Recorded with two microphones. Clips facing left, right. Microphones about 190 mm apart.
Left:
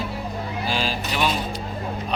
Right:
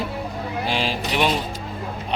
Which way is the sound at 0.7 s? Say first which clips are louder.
Right 2 dB; 25° right (ahead or behind).